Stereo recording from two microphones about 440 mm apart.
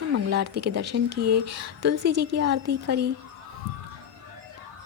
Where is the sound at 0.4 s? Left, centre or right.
Right.